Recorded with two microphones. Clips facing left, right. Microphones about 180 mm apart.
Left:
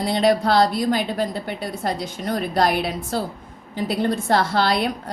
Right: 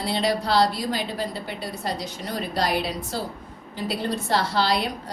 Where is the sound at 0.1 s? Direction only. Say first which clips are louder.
Left 5 dB; 50° left (ahead or behind).